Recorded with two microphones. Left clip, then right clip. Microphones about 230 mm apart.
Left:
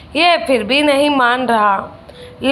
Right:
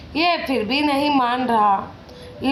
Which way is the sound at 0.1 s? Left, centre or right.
Left.